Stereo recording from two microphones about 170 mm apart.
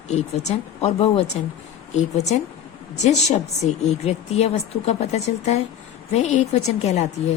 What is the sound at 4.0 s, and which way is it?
Speech, 40° left (ahead or behind).